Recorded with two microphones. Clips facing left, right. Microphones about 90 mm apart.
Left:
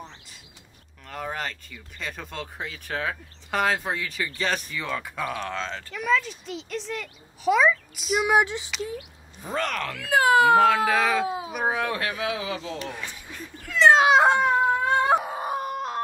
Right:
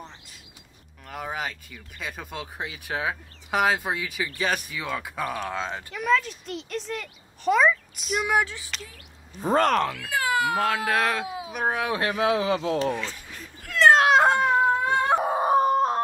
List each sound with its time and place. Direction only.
1.0 s speech: 5° right (ahead or behind)
5.9 s a child's voice: centre (ahead or behind)
8.3 s a sound: 20° left (ahead or behind)
9.4 s a man's voice: 40° right (ahead or behind)
10.0 s speech: 30° left (ahead or behind)
10.6 s a child's voice: 5° right (ahead or behind)
11.2 s a sound: 35° left (ahead or behind)
11.5 s a child's voice: centre (ahead or behind)
12.0 s a man's voice: 35° right (ahead or behind)
13.7 s a sound: centre (ahead or behind)
15.2 s howl: 35° right (ahead or behind)